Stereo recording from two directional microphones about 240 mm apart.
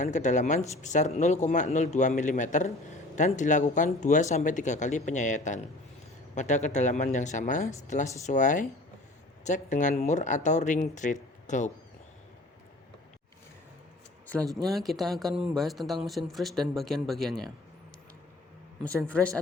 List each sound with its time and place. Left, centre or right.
0.0 s speech: left
14.5 s speech: centre
19.0 s speech: centre